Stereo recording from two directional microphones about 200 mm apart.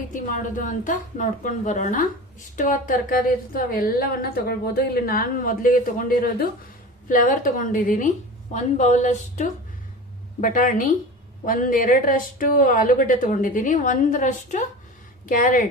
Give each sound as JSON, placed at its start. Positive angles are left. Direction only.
{"t": 0.1, "sound": "a woman's voice", "side_deg": 40}